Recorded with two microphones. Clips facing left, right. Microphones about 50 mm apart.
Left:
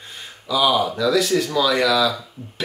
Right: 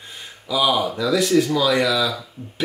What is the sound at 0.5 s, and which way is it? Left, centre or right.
Speech, centre.